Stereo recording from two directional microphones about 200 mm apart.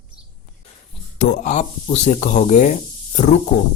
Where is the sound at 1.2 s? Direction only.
40° left (ahead or behind).